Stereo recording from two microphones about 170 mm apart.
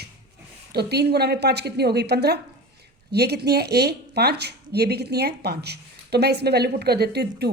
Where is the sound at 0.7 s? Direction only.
70° right (ahead or behind).